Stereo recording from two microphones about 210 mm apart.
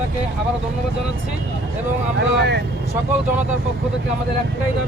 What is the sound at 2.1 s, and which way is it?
Speech, 55° right (ahead or behind).